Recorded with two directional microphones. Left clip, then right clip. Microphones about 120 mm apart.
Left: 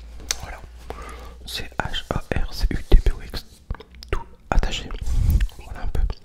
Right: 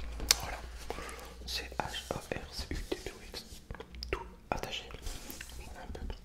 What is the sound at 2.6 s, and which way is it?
Whispering, 90° left.